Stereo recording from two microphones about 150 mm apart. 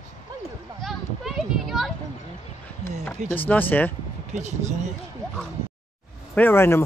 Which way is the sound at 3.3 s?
10° left (ahead or behind).